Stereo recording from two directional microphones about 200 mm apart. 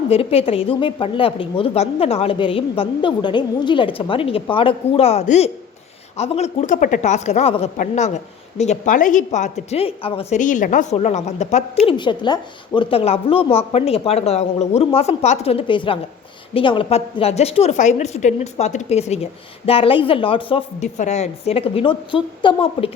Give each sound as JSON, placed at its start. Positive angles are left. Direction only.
{"t": 0.1, "sound": "a woman's voice", "side_deg": 30}
{"t": 11.9, "sound": "a woman's voice", "side_deg": 20}